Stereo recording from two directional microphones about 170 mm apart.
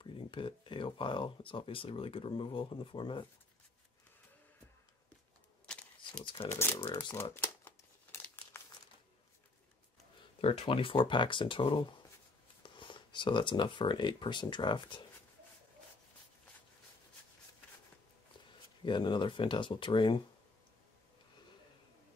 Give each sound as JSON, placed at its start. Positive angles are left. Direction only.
{"t": 0.0, "sound": "speech", "side_deg": 30}
{"t": 5.7, "sound": "camera", "side_deg": 5}
{"t": 6.5, "sound": "speech", "side_deg": 15}
{"t": 6.8, "sound": "speech", "side_deg": 25}
{"t": 7.3, "sound": "crumpling", "side_deg": 15}
{"t": 10.4, "sound": "speech", "side_deg": 30}
{"t": 18.8, "sound": "speech", "side_deg": 30}